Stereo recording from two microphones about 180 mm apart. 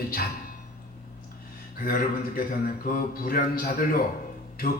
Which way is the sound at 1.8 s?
55° left (ahead or behind).